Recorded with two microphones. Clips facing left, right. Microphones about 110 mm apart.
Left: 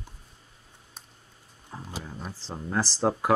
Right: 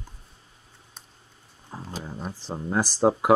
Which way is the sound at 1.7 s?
25° right (ahead or behind).